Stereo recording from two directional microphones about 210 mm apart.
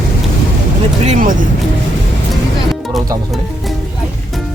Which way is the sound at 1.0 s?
35° right (ahead or behind).